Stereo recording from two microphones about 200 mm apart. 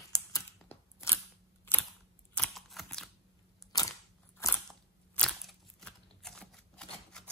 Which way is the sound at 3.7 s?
20° left (ahead or behind).